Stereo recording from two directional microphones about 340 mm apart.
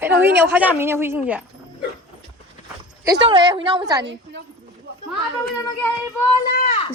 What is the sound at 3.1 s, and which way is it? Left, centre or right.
Speech, centre.